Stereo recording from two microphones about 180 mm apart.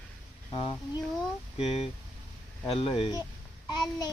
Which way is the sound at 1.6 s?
35° left (ahead or behind).